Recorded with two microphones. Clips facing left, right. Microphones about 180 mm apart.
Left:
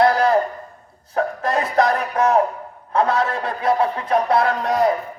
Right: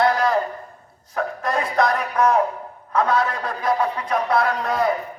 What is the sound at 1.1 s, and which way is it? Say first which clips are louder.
Chuckle: left 3 dB; 35° left (ahead or behind).